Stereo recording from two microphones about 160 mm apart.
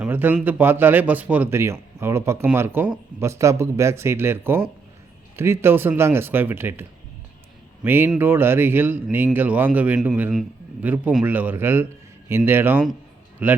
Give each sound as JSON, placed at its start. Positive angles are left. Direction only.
{"t": 0.0, "sound": "speech", "side_deg": -10}
{"t": 7.9, "sound": "speech", "side_deg": -15}